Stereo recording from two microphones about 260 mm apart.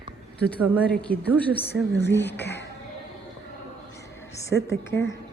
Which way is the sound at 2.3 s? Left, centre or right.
Left.